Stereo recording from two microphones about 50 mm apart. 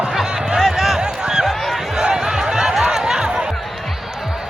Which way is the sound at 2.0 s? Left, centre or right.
Centre.